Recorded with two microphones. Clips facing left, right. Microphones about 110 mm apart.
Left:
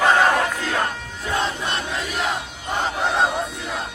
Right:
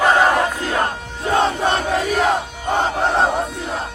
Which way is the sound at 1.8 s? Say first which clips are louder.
Right 8 dB; 50° right (ahead or behind).